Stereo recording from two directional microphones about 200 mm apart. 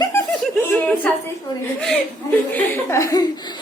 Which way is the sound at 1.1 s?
5° left (ahead or behind).